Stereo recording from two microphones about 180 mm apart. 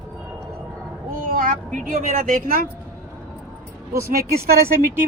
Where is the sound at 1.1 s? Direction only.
45° right (ahead or behind).